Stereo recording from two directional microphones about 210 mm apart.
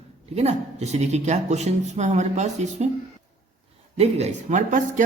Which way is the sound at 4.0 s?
30° right (ahead or behind).